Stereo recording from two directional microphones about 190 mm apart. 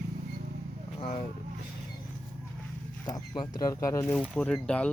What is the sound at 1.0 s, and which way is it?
Speech, 35° left (ahead or behind).